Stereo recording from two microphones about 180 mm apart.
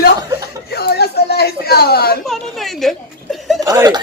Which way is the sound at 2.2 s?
Centre (ahead or behind).